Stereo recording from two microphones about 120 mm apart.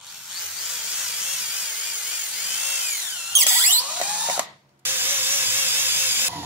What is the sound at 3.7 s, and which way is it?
Drill, 10° right (ahead or behind).